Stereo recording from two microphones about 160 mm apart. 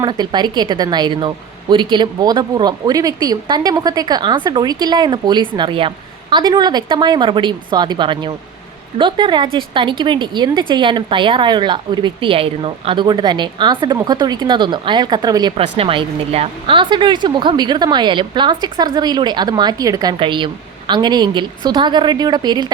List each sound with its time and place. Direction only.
0.0 s speech: 25° right (ahead or behind)
15.5 s speech: 35° right (ahead or behind)